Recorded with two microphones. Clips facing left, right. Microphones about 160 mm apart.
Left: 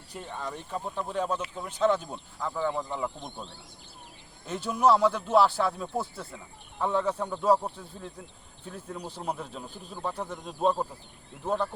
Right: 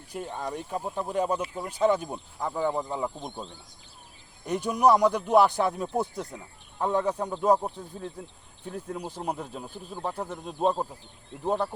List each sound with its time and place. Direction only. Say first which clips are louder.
0.1 s speech: right 4 dB; 10° right (ahead or behind)
4.4 s speech: right 2 dB; 15° right (ahead or behind)
9.0 s speech: left 1 dB; 10° right (ahead or behind)